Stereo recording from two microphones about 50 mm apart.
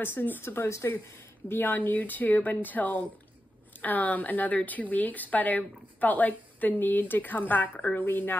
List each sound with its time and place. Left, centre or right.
0.0 s speech: left
0.4 s speech: left
1.5 s speech: left